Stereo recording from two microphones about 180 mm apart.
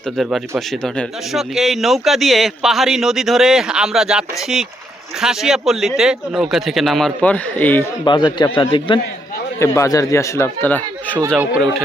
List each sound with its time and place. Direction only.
0.2 s speech: centre (ahead or behind)
8.0 s a man's voice: 25° left (ahead or behind)
9.6 s speech: 15° left (ahead or behind)
11.3 s speech: 5° right (ahead or behind)